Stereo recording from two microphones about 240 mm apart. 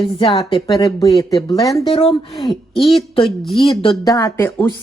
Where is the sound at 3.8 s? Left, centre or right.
Centre.